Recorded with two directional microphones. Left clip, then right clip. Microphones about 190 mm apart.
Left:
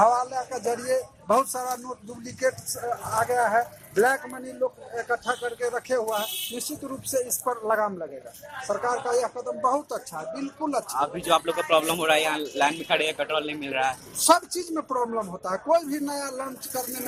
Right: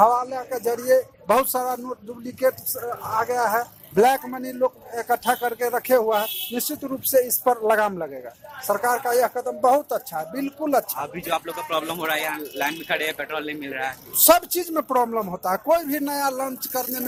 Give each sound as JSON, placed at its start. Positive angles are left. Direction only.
{"t": 0.0, "sound": "speech", "side_deg": -35}
{"t": 3.2, "sound": "speech", "side_deg": -35}
{"t": 11.0, "sound": "speech", "side_deg": 5}
{"t": 14.2, "sound": "speech", "side_deg": -55}